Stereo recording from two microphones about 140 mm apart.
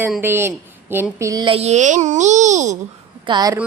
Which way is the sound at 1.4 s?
45° right (ahead or behind).